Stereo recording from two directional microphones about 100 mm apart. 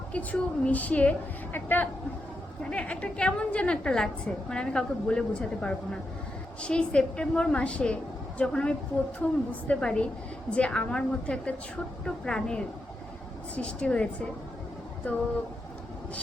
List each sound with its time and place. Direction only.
0.1 s a woman's voice: 15° left (ahead or behind)